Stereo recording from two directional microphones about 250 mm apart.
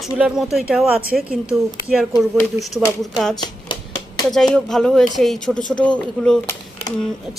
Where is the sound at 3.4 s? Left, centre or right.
Centre.